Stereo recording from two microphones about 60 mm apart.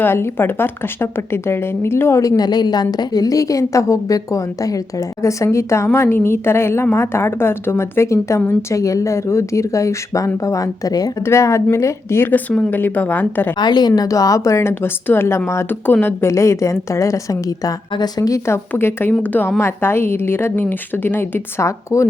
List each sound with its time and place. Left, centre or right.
0.0 s a woman's voice: left
2.2 s a woman's voice: left
11.3 s a woman's voice: left
12.2 s a woman's voice: left
13.9 s a woman's voice: left
16.2 s a woman's voice: left
18.7 s a woman's voice: left
19.2 s a woman's voice: left
19.5 s a woman's voice: left
21.6 s a woman's voice: left